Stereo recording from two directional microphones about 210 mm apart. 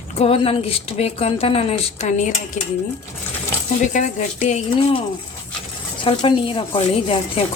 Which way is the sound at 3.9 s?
35° left (ahead or behind).